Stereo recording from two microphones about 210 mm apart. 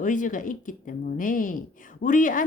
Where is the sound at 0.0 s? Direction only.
40° left (ahead or behind).